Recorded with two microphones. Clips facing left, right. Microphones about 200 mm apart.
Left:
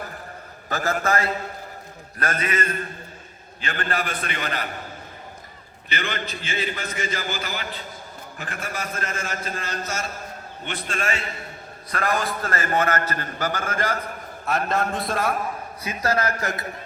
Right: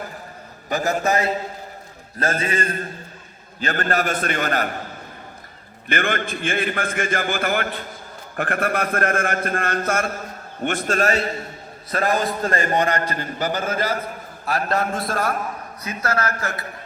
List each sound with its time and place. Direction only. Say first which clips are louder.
0.7 s a man's voice: right 3 dB; 15° right (ahead or behind)
3.6 s a man's voice: right 5 dB; 40° right (ahead or behind)
5.9 s a man's voice: right 6 dB; 50° right (ahead or behind)
11.9 s a man's voice: right 4 dB; 25° right (ahead or behind)
12.5 s a man's voice: right 4 dB; 30° right (ahead or behind)
12.7 s a man's voice: right 2 dB; 15° right (ahead or behind)
15.8 s a man's voice: left 1 dB; 15° left (ahead or behind)